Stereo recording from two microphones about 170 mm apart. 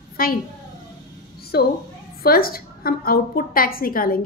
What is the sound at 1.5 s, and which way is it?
A woman's voice, 65° left (ahead or behind).